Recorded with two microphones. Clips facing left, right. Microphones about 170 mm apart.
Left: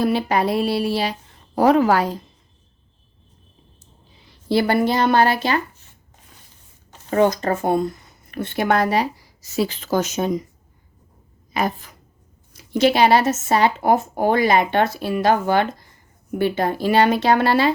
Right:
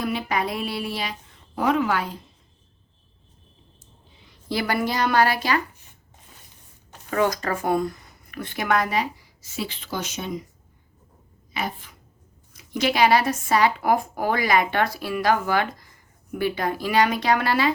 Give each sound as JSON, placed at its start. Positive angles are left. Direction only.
{"t": 0.0, "sound": "speech", "side_deg": 30}
{"t": 4.3, "sound": "speech", "side_deg": 30}
{"t": 7.1, "sound": "speech", "side_deg": 25}
{"t": 11.5, "sound": "a woman's voice", "side_deg": 45}
{"t": 12.5, "sound": "speech", "side_deg": 30}